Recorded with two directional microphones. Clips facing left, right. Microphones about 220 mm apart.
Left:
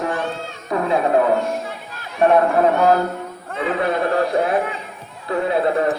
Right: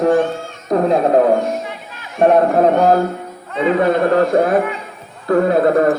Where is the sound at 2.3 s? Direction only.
40° right (ahead or behind).